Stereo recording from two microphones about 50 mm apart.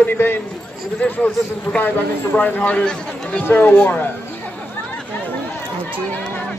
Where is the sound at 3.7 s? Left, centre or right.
Left.